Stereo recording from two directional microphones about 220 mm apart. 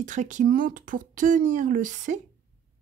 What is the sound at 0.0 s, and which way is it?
Speech, 35° right (ahead or behind).